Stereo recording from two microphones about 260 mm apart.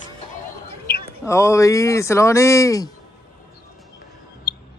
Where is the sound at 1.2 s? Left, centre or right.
Centre.